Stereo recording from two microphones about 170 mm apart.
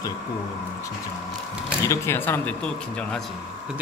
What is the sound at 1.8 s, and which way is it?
Speech, 15° left (ahead or behind).